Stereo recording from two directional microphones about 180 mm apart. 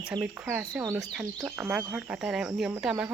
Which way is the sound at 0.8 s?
20° right (ahead or behind).